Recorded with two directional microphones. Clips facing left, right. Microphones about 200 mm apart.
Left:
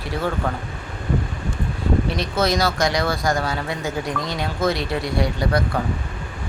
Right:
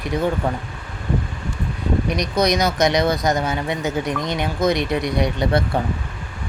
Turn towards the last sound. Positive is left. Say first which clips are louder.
# right 2 dB
turn(degrees=-20)  # may be behind; listen again after turning